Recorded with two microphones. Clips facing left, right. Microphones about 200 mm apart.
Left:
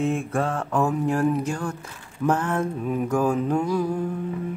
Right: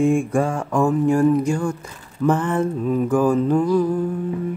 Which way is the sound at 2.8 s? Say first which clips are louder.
Right 5 dB; 10° left (ahead or behind).